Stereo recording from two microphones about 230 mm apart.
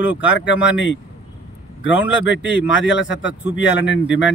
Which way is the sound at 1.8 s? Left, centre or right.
Left.